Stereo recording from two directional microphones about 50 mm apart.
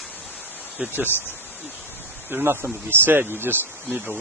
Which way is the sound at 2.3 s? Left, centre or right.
Right.